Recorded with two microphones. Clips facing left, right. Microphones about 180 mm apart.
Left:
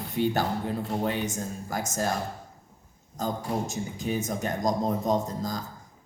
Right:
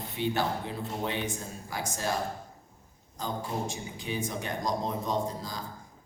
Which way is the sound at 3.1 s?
45° left (ahead or behind).